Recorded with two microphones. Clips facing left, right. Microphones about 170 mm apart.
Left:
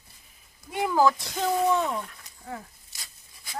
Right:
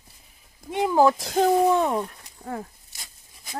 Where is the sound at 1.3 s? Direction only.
50° right (ahead or behind).